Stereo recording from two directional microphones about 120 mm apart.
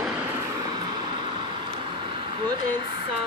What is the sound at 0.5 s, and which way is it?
Vehicle, 35° right (ahead or behind).